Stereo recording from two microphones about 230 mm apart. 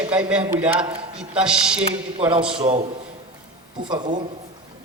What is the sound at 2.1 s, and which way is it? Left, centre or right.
Speech, right.